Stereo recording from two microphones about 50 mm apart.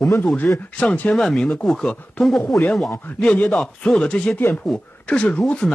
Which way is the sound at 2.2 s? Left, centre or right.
Left.